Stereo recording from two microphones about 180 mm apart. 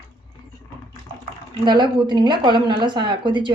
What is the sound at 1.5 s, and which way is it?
A woman's voice, 25° right (ahead or behind).